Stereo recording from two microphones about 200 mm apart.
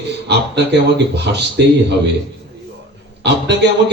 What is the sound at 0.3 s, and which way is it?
Speech, 60° right (ahead or behind).